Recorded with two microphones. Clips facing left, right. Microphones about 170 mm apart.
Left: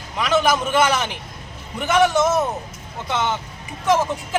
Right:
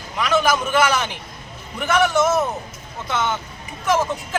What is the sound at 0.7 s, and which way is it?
Speech, 25° left (ahead or behind).